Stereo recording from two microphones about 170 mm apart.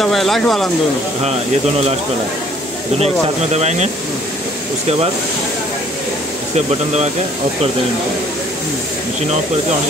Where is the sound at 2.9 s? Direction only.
40° right (ahead or behind).